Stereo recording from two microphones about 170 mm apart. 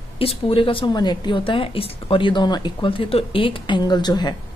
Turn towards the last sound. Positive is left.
turn(degrees=25)  # may be behind; listen again after turning